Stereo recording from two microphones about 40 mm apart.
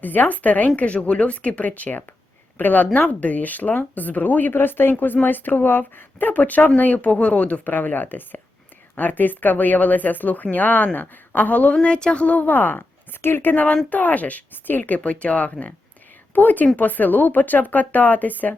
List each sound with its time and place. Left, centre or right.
0.0 s speech: left
7.7 s speech: left
12.5 s speech: left
13.2 s speech: left
15.0 s speech: left